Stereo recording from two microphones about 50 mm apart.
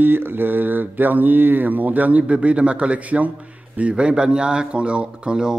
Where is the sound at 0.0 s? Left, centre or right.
Right.